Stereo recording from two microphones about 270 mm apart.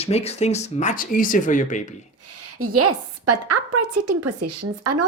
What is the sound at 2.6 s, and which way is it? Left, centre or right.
A woman's voice, right.